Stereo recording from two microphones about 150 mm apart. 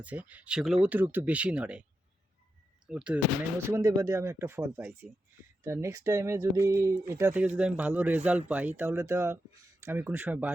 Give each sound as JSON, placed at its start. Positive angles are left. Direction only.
{"t": 0.0, "sound": "speech", "side_deg": -10}
{"t": 2.8, "sound": "speech", "side_deg": -5}
{"t": 3.7, "sound": "speech", "side_deg": -20}